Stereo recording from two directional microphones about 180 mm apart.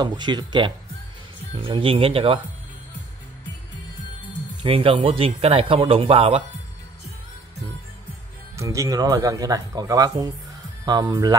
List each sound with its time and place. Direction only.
0.0 s a man's voice: 25° right (ahead or behind)
4.6 s a man's voice: 30° right (ahead or behind)
8.5 s speech: 15° right (ahead or behind)